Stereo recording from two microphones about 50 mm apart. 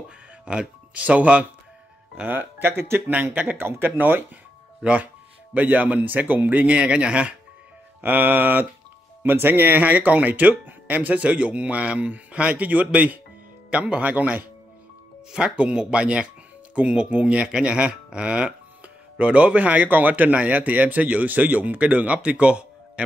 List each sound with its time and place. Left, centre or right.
0.5 s speech: right
2.1 s speech: right
5.5 s speech: right
8.0 s speech: right